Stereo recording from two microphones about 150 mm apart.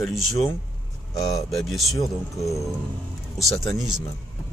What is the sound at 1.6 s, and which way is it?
Speech, centre (ahead or behind).